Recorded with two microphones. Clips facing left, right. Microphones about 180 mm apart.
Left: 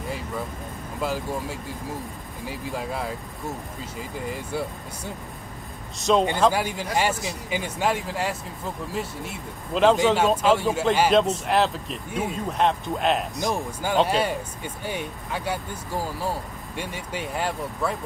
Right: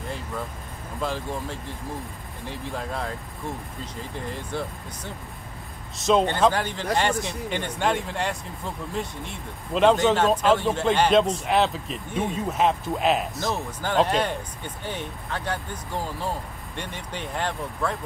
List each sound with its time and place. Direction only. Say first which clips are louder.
1.0 s speech: left 2 dB; 5° left (ahead or behind)
4.3 s a man's voice: left 2 dB; 10° left (ahead or behind)
13.4 s speech: left 2 dB; 15° left (ahead or behind)